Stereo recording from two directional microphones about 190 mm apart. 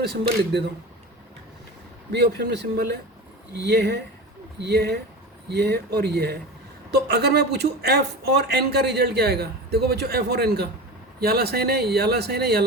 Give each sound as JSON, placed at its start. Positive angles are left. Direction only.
{"t": 0.0, "sound": "speech", "side_deg": -60}
{"t": 2.1, "sound": "speech", "side_deg": -60}